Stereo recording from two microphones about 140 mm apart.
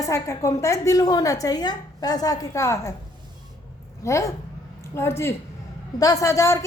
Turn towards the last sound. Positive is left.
turn(degrees=20)  # may be behind; listen again after turning